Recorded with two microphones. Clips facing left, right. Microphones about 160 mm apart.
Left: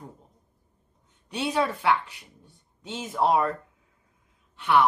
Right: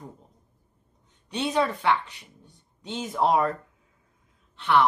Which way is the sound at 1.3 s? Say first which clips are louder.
Right 1 dB; 5° left (ahead or behind).